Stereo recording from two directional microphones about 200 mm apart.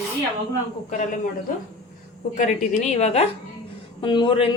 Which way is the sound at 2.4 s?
35° left (ahead or behind).